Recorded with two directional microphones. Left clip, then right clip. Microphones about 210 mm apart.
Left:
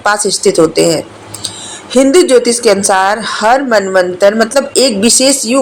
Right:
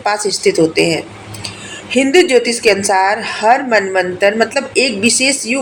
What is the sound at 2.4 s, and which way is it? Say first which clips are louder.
Speech: left 5 dB; 90° left.